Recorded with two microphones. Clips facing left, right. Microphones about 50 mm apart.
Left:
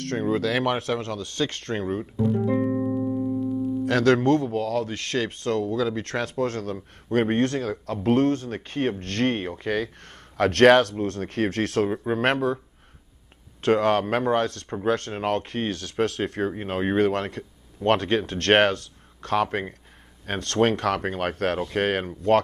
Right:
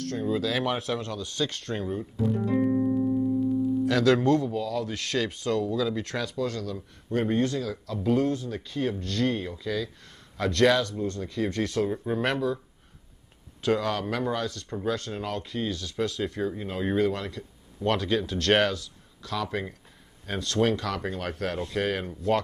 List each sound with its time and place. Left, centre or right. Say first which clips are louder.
0.0 s speech: left 3 dB; left
2.4 s music: left 1 dB; centre
3.8 s speech: left 3 dB; left
11.9 s speech: left 4 dB; left
13.6 s speech: left 6 dB; left